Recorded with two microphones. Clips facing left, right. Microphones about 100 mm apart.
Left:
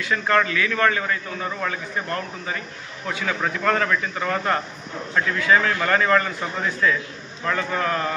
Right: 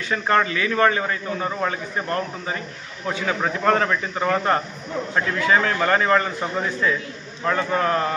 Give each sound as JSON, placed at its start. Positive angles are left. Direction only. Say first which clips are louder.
{"t": 0.0, "sound": "a man's voice", "louder": "even", "side_deg": -30}